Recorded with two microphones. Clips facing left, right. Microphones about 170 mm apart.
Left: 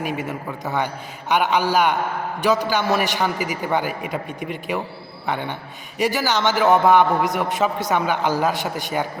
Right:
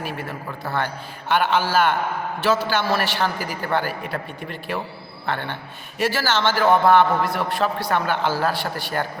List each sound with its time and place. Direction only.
0.3 s a man's voice: 20° left (ahead or behind)